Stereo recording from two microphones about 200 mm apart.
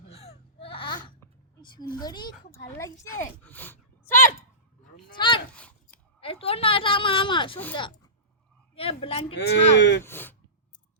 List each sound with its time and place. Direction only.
0.1 s a sound: 30° left (ahead or behind)
2.0 s speech: 20° left (ahead or behind)
5.1 s speech: 25° left (ahead or behind)
5.5 s a sound: 5° left (ahead or behind)
6.1 s a woman's voice: 30° left (ahead or behind)
9.4 s speech: 55° left (ahead or behind)
10.0 s speech: 10° left (ahead or behind)